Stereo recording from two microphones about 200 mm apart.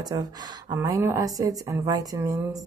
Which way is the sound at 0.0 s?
20° right (ahead or behind).